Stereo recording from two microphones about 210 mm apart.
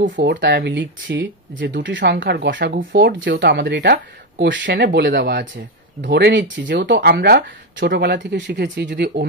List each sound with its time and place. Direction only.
0.0 s speech: 45° right (ahead or behind)